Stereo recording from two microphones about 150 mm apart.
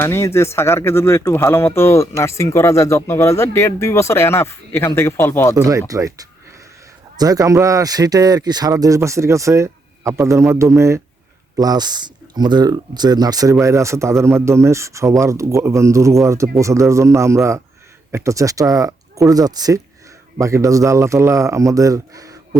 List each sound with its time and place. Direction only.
0.0 s speech: 15° left (ahead or behind)
5.5 s speech: 20° right (ahead or behind)